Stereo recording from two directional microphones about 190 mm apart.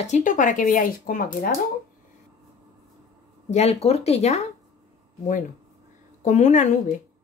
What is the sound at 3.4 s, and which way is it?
A woman's voice, 35° left (ahead or behind).